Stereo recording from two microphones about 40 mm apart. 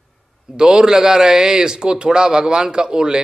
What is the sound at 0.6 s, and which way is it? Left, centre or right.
Speech, right.